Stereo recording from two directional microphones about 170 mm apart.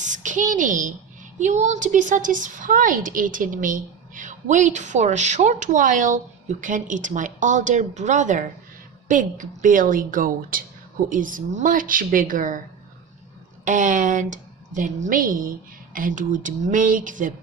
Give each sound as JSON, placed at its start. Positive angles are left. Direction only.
{"t": 0.0, "sound": "a child's voice", "side_deg": -45}
{"t": 13.7, "sound": "a woman's voice", "side_deg": -50}